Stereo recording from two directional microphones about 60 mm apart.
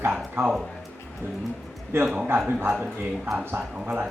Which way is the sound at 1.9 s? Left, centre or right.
Right.